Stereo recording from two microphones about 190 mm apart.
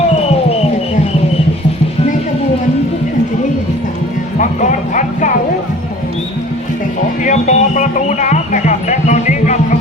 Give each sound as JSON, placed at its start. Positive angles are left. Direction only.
{"t": 4.4, "sound": "music", "side_deg": 40}
{"t": 7.3, "sound": "music", "side_deg": 40}